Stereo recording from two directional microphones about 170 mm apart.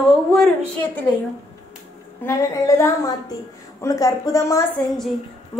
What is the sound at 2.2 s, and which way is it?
A woman's voice, 20° left (ahead or behind).